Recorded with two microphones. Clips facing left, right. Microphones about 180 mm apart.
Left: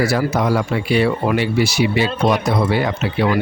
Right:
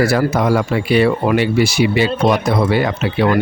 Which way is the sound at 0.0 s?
55° right (ahead or behind).